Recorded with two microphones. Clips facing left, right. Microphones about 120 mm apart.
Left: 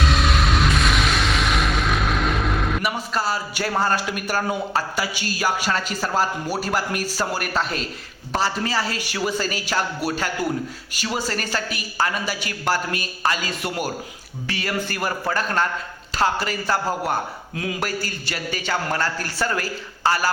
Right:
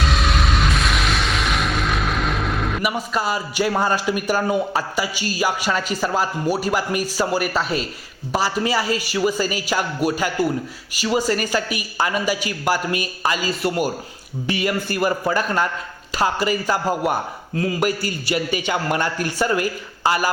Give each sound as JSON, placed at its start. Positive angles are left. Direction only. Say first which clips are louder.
{"t": 0.0, "sound": "music", "louder": "even", "side_deg": 0}
{"t": 3.2, "sound": "a man's voice", "louder": "right 3 dB", "side_deg": -15}
{"t": 3.7, "sound": "a man's voice", "louder": "right 1 dB", "side_deg": 0}
{"t": 10.0, "sound": "a man's voice", "louder": "right 4 dB", "side_deg": -45}
{"t": 11.5, "sound": "a man's voice", "louder": "right 3 dB", "side_deg": -10}
{"t": 17.5, "sound": "speech", "louder": "right 6 dB", "side_deg": 5}
{"t": 17.7, "sound": "a man's voice", "louder": "right 5 dB", "side_deg": -10}